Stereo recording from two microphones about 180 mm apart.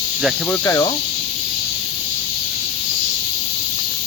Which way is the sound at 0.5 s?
15° left (ahead or behind).